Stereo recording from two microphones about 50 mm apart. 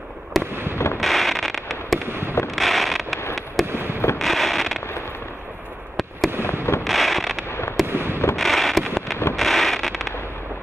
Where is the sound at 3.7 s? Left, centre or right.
Right.